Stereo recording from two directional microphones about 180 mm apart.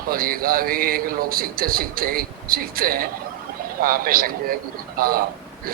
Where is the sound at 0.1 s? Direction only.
55° right (ahead or behind).